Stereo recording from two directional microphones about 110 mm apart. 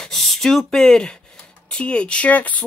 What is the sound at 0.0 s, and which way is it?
Speech, centre (ahead or behind).